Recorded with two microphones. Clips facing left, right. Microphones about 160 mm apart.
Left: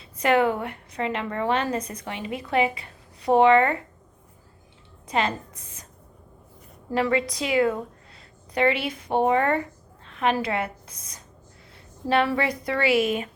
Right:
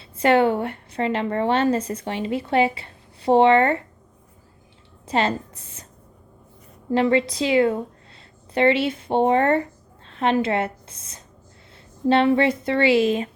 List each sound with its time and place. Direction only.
0.0 s a woman's voice: 30° right (ahead or behind)
5.0 s speech: 30° right (ahead or behind)
6.9 s a woman's voice: 25° right (ahead or behind)